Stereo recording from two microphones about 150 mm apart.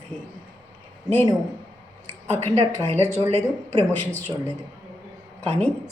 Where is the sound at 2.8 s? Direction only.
45° right (ahead or behind).